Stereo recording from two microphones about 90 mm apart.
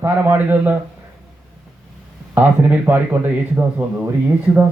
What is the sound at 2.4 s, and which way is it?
Speech, 20° right (ahead or behind).